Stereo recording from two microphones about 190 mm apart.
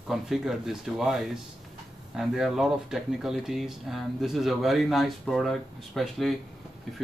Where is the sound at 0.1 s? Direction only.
Centre (ahead or behind).